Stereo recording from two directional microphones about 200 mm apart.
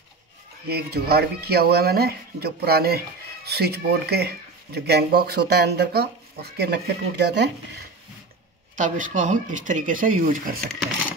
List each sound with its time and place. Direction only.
0.7 s speech: 50° right (ahead or behind)
8.7 s speech: 40° right (ahead or behind)